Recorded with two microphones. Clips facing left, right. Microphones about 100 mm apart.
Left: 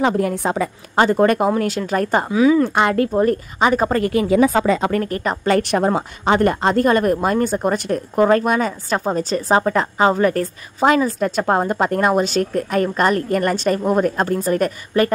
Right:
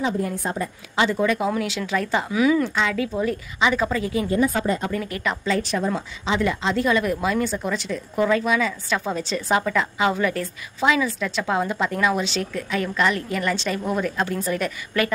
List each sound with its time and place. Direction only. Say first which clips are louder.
0.0 s a woman's voice: left 6 dB; 70° left (ahead or behind)
0.9 s speech: left 6 dB; 50° left (ahead or behind)
2.2 s speech: left 5 dB; 25° left (ahead or behind)
2.7 s a woman's voice: left 7 dB; 55° left (ahead or behind); by 5.0 s 90° left
5.0 s speech: left 5 dB; 40° left (ahead or behind)
5.4 s speech: left 8 dB; 65° left (ahead or behind); by 15.1 s 45° left (ahead or behind)